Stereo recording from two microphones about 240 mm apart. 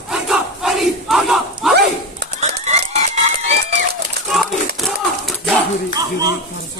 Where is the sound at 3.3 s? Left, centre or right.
Right.